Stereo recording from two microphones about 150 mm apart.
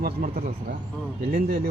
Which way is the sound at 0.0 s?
75° right (ahead or behind).